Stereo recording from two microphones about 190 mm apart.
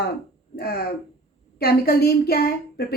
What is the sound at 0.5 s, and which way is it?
A woman's voice, 55° left (ahead or behind).